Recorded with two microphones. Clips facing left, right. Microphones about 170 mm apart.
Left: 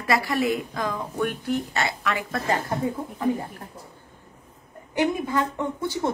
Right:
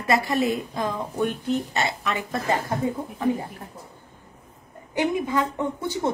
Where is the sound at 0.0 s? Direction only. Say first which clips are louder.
Right 1 dB; 20° right (ahead or behind).